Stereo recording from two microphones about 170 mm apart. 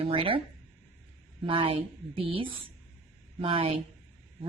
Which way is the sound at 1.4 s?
30° right (ahead or behind).